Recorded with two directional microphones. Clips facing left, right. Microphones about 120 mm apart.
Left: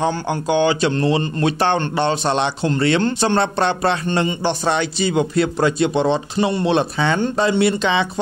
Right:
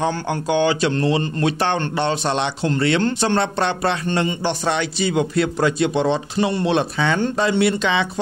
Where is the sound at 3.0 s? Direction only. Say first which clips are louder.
Left 1 dB; 25° left (ahead or behind).